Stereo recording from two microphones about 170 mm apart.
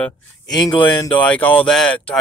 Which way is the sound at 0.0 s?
Centre (ahead or behind).